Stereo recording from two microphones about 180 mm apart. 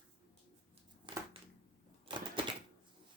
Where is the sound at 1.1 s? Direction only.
25° right (ahead or behind).